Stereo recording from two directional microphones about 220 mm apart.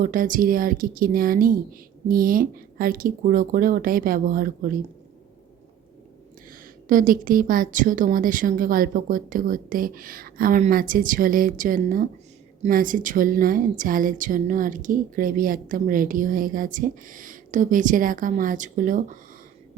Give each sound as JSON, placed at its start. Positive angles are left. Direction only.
{"t": 0.0, "sound": "a woman's voice", "side_deg": -40}
{"t": 6.8, "sound": "a woman's voice", "side_deg": -40}